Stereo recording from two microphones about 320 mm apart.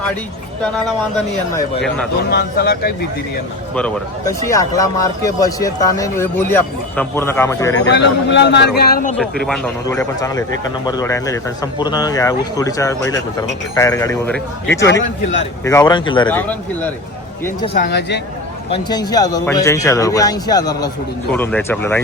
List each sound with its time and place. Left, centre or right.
2.3 s speech: left
3.8 s speech: centre
7.9 s speech: left
9.1 s speech: centre
17.7 s speech: left
18.7 s speech: centre